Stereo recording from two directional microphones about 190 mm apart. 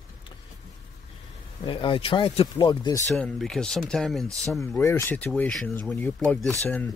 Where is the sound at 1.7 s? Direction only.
25° left (ahead or behind).